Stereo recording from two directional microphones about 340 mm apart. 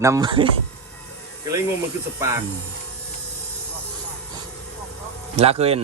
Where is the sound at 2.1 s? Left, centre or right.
Centre.